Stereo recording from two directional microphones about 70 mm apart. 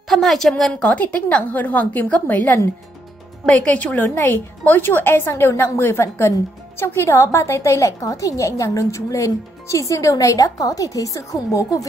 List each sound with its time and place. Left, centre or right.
0.1 s a woman's voice: centre
0.8 s a woman's voice: left